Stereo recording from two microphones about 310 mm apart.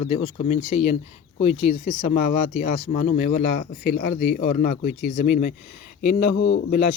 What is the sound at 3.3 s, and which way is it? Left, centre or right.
A man's voice, left.